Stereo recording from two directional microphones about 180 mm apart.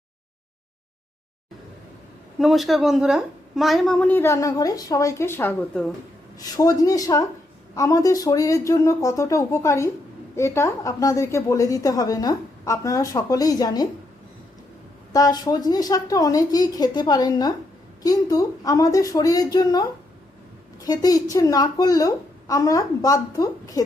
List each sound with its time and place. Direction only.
2.4 s a woman's voice: centre (ahead or behind)
6.4 s a woman's voice: 20° left (ahead or behind)
15.1 s a woman's voice: 20° left (ahead or behind)